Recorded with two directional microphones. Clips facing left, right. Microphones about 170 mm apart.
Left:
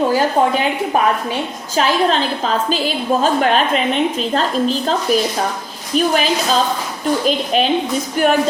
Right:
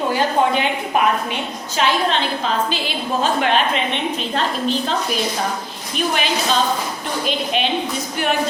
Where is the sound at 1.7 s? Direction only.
40° left (ahead or behind).